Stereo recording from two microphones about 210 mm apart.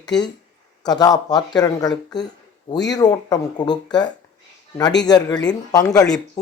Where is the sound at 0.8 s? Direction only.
20° left (ahead or behind).